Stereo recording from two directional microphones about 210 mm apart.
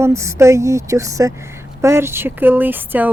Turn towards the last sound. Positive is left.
turn(degrees=-10)  # may be behind; listen again after turning